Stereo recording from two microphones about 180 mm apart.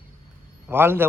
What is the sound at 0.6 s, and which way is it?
Speech, 10° right (ahead or behind).